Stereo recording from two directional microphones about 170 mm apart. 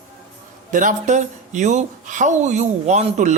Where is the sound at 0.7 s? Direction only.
50° right (ahead or behind).